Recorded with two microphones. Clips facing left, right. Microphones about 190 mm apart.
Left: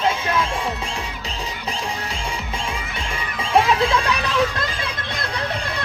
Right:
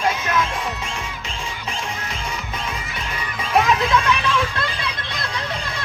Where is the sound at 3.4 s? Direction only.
30° left (ahead or behind); by 5.2 s 45° left (ahead or behind).